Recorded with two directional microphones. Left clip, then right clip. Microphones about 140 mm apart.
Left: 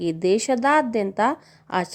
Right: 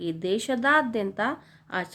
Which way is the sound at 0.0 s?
45° left (ahead or behind).